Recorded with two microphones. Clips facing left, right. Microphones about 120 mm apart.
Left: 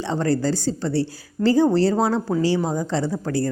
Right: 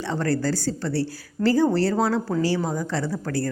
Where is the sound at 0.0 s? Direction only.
25° left (ahead or behind).